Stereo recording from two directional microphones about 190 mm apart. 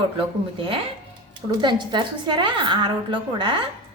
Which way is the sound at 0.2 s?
30° right (ahead or behind).